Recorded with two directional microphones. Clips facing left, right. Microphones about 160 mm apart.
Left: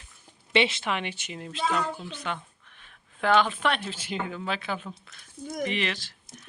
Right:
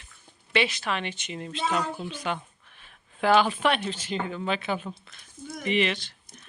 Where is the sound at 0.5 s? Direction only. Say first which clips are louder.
Left 1 dB; 25° left (ahead or behind); by 3.9 s centre (ahead or behind).